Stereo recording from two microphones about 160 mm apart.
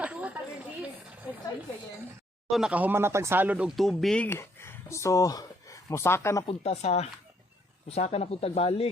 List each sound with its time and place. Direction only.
0.0 s chatter: 10° right (ahead or behind)
2.5 s speech: 5° right (ahead or behind)
3.8 s speech: centre (ahead or behind)
6.5 s speech: 40° left (ahead or behind)